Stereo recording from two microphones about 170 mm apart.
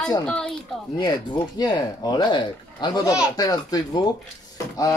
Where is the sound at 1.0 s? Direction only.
25° left (ahead or behind).